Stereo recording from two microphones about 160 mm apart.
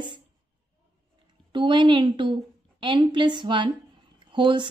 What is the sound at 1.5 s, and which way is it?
Speech, 30° right (ahead or behind).